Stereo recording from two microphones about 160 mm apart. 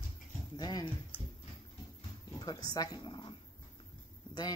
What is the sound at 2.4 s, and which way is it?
Dog, 25° left (ahead or behind).